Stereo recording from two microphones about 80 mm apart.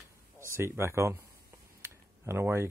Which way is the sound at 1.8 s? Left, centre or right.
Right.